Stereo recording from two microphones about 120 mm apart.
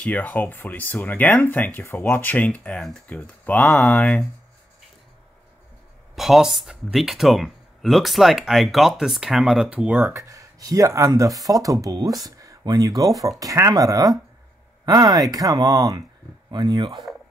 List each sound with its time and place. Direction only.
0.0 s speech: 10° left (ahead or behind)
6.1 s speech: centre (ahead or behind)
10.1 s speech: 25° right (ahead or behind)